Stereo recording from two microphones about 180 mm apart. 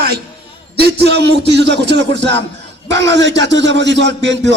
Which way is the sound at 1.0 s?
70° right (ahead or behind).